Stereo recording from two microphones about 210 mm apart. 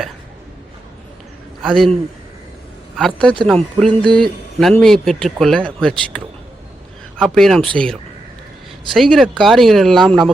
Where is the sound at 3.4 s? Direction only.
5° left (ahead or behind).